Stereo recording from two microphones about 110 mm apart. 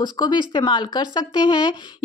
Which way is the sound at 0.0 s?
45° left (ahead or behind).